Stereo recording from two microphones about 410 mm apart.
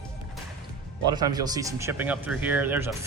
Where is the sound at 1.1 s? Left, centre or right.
Centre.